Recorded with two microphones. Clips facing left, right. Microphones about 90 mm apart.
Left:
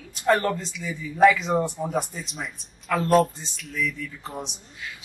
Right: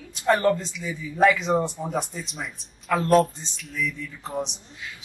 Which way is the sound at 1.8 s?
5° left (ahead or behind).